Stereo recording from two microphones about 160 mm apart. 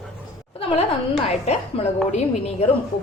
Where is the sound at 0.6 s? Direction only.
40° left (ahead or behind).